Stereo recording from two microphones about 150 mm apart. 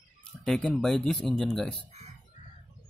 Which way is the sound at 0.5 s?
5° left (ahead or behind).